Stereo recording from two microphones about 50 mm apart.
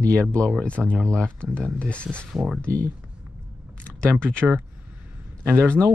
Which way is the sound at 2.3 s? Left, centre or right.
Centre.